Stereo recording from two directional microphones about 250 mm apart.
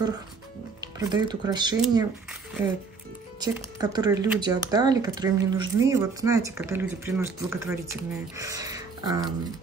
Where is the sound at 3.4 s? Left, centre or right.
Centre.